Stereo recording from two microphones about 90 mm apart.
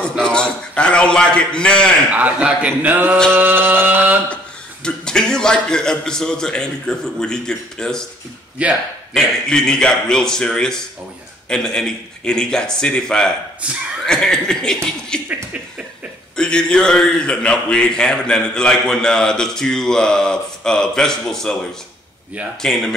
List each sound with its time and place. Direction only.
0.2 s a man's voice: 10° left (ahead or behind)
2.0 s speech: 15° right (ahead or behind)
3.3 s music: 25° right (ahead or behind)
4.8 s a man's voice: 10° left (ahead or behind)
8.6 s speech: 15° right (ahead or behind)
9.1 s a man's voice: 5° left (ahead or behind)
13.6 s speech: 15° right (ahead or behind)
14.0 s a man's voice: 5° left (ahead or behind)
16.3 s a man's voice: 10° left (ahead or behind)
22.6 s speech: 5° left (ahead or behind)